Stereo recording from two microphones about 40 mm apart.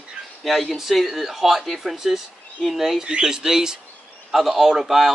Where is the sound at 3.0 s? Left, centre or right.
Centre.